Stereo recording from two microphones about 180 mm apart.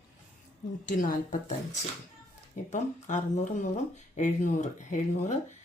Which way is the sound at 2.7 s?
40° left (ahead or behind).